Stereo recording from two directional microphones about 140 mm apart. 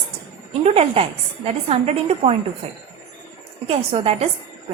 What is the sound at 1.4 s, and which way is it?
Speech, 45° right (ahead or behind).